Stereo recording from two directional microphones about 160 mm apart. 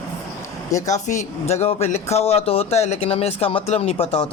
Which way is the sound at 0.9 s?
50° left (ahead or behind).